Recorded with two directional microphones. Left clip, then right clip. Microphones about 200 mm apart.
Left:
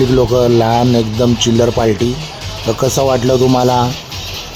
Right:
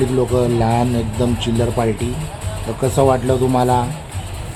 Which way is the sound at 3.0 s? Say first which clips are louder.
Left 2 dB; 30° left (ahead or behind).